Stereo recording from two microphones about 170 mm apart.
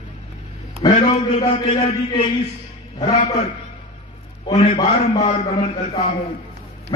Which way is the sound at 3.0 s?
35° left (ahead or behind).